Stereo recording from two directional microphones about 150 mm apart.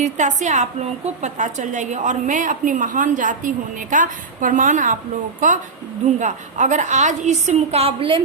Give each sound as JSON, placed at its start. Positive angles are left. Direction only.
{"t": 0.0, "sound": "a woman's voice", "side_deg": -55}